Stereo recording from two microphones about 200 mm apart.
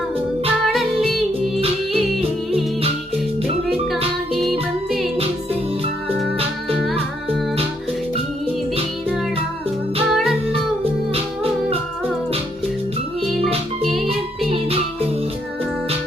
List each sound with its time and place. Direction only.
0.7 s music: centre (ahead or behind)
3.4 s music: 30° right (ahead or behind)
4.9 s music: centre (ahead or behind)
10.2 s music: centre (ahead or behind)